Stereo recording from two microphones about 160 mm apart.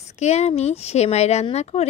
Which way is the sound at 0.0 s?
45° left (ahead or behind).